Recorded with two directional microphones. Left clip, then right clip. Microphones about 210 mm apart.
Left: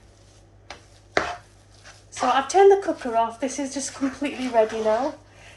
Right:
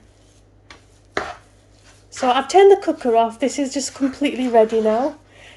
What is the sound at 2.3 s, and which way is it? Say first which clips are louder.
Speech: right 4 dB; 50° right (ahead or behind).